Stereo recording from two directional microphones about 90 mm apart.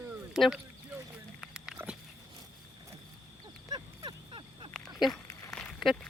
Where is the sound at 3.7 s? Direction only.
50° right (ahead or behind).